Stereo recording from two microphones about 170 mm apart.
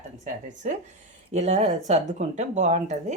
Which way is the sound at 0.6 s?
50° right (ahead or behind).